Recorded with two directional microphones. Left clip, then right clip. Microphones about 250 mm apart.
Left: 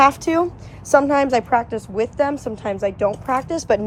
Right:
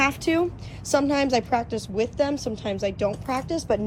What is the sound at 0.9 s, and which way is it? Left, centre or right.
A woman's voice, centre.